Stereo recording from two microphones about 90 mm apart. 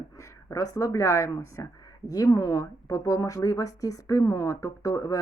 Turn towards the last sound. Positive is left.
turn(degrees=40)  # may be behind; listen again after turning